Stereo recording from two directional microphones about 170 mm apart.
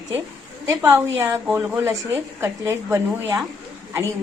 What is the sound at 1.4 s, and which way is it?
Speech, 5° right (ahead or behind).